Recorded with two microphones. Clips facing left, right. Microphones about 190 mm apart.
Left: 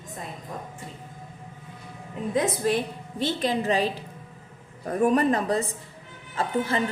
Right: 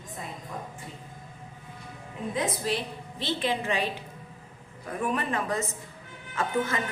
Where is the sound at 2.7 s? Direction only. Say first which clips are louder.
Left 5 dB; 45° left (ahead or behind).